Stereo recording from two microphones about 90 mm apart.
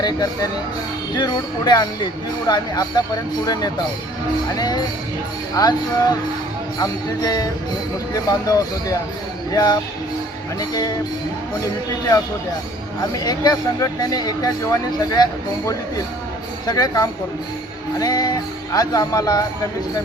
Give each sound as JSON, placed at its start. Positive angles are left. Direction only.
{"t": 0.0, "sound": "speech", "side_deg": 45}
{"t": 13.0, "sound": "speech", "side_deg": 45}
{"t": 16.6, "sound": "speech", "side_deg": 45}